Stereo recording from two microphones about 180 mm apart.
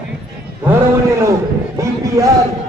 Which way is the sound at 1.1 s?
15° right (ahead or behind).